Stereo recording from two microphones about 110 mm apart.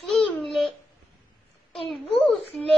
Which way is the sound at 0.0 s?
Centre (ahead or behind).